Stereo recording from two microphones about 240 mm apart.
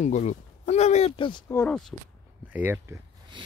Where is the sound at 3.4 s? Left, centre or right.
Centre.